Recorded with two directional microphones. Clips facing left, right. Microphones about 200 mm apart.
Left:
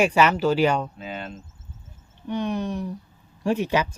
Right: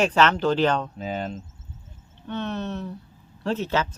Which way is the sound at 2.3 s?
15° left (ahead or behind).